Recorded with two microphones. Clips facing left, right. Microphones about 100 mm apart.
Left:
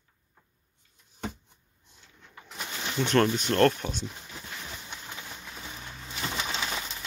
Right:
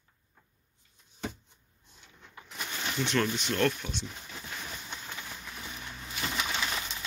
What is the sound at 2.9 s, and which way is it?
Speech, 45° left (ahead or behind).